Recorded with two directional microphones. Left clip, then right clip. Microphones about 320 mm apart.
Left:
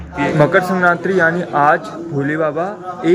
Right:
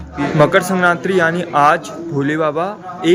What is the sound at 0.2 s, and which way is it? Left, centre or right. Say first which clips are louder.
A man's voice: even; centre.